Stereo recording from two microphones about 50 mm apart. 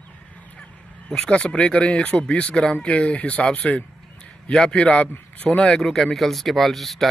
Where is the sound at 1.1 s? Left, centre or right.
Centre.